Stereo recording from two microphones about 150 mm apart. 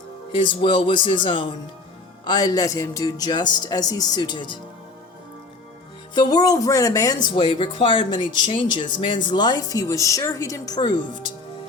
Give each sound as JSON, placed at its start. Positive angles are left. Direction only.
{"t": 0.3, "sound": "speech", "side_deg": 35}
{"t": 6.1, "sound": "speech", "side_deg": 25}